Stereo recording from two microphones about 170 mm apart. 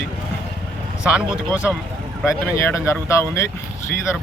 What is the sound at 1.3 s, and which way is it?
A man's voice, 15° left (ahead or behind).